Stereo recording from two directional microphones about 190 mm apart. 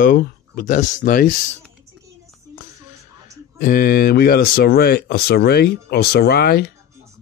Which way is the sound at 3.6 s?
50° left (ahead or behind).